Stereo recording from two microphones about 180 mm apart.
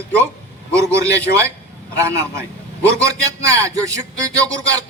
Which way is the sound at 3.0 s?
15° right (ahead or behind).